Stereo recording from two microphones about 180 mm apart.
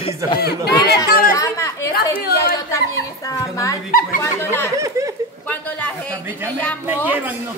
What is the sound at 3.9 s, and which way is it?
Speech, 50° left (ahead or behind).